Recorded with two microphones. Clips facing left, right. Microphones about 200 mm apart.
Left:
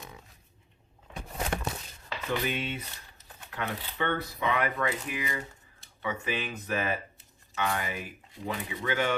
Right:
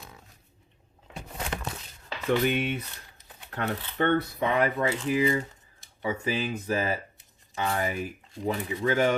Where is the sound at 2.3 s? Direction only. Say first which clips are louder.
Right 6 dB; 60° right (ahead or behind).